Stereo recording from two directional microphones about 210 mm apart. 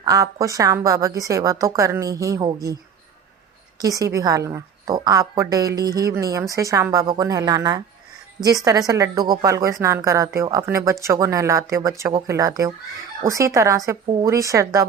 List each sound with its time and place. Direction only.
0.0 s a woman's voice: 15° right (ahead or behind)
3.8 s a woman's voice: 15° right (ahead or behind)
8.9 s a woman's voice: 15° right (ahead or behind)